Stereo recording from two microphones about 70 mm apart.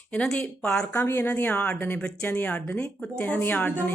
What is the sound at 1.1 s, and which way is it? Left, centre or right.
A woman's voice, left.